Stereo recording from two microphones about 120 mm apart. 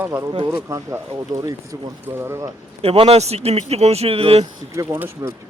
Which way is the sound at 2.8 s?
55° right (ahead or behind).